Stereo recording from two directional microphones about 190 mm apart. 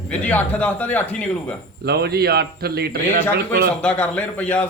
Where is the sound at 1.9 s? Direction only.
55° right (ahead or behind).